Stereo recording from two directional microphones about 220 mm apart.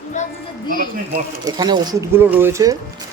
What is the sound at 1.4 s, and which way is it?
Speech, 20° right (ahead or behind).